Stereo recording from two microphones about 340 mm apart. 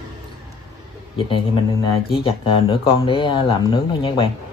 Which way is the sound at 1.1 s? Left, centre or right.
Centre.